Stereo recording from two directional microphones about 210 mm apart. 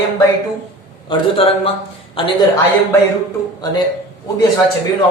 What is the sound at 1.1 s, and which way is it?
A man's voice, 25° left (ahead or behind).